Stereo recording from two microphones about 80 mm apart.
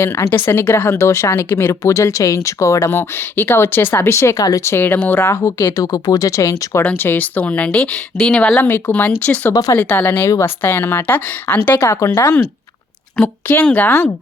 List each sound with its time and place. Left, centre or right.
0.0 s a woman's voice: left
0.9 s a woman's voice: left
5.3 s speech: left
6.9 s a woman's voice: left
8.6 s a woman's voice: left
10.2 s speech: left
10.6 s a woman's voice: left
11.8 s speech: left
13.2 s a woman's voice: centre